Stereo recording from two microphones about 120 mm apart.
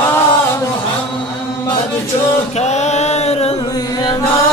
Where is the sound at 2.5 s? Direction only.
70° left (ahead or behind).